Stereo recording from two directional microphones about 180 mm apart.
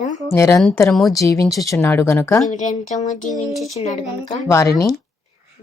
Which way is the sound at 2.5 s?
45° left (ahead or behind).